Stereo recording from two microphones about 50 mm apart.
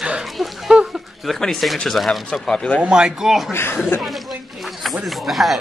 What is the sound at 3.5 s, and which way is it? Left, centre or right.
Speech, left.